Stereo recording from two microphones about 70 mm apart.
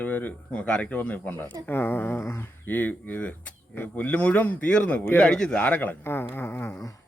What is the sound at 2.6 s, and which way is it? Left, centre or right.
Speech, left.